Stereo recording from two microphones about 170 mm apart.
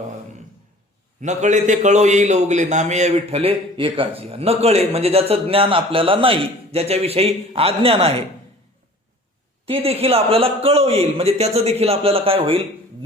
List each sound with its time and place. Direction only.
1.2 s a man's voice: 45° right (ahead or behind)
9.6 s a man's voice: 35° right (ahead or behind)